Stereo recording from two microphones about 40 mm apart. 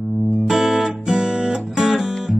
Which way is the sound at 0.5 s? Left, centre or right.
Centre.